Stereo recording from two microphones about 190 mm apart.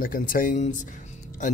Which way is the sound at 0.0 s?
45° left (ahead or behind).